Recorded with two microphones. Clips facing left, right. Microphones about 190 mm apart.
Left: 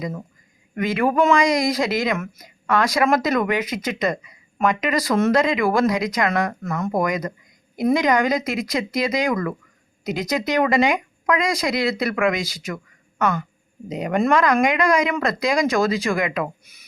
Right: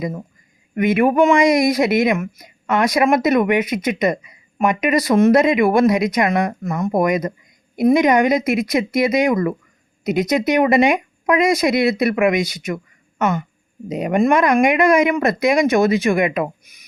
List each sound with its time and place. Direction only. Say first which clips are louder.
0.8 s a woman's voice: right 5 dB; 20° right (ahead or behind)